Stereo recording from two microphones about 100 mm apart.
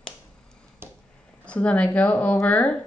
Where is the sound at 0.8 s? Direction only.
25° right (ahead or behind).